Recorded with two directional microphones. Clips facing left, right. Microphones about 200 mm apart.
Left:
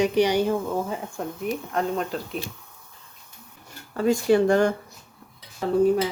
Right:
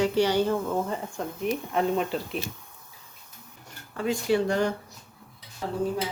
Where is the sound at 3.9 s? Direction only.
45° left (ahead or behind).